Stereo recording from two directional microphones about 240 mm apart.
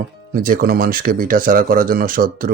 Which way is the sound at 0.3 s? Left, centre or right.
Right.